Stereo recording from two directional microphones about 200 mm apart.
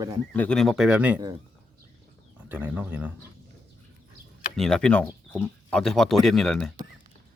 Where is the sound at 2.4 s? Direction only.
10° right (ahead or behind).